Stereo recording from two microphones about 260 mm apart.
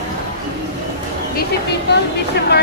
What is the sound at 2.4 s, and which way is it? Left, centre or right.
Speech, left.